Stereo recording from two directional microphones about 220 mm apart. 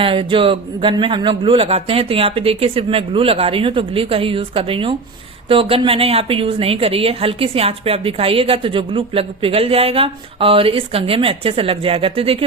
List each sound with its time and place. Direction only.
0.0 s a woman's voice: 25° right (ahead or behind)